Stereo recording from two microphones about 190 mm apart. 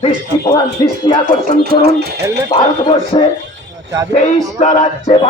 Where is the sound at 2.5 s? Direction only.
25° left (ahead or behind).